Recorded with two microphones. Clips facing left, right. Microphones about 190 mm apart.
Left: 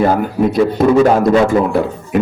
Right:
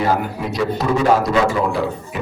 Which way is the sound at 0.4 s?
50° left (ahead or behind).